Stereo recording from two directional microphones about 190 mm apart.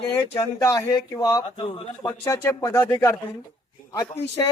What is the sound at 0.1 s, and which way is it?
Speech, 15° left (ahead or behind).